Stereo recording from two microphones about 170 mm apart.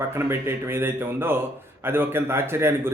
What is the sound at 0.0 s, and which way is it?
A man's voice, 15° right (ahead or behind).